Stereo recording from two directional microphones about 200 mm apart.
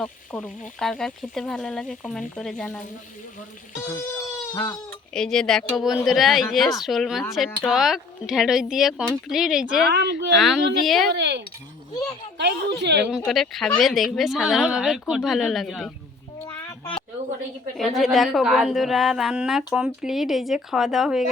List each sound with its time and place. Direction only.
0.0 s speech: 5° left (ahead or behind)
3.8 s a sound: 15° left (ahead or behind)
5.1 s speech: 5° left (ahead or behind)
9.9 s speech: 60° right (ahead or behind)
10.3 s speech: centre (ahead or behind)
11.1 s speech: 60° right (ahead or behind)
13.1 s speech: centre (ahead or behind)
17.7 s speech: centre (ahead or behind)